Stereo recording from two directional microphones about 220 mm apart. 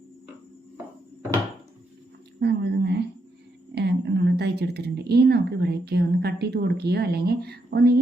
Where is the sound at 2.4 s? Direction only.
50° right (ahead or behind).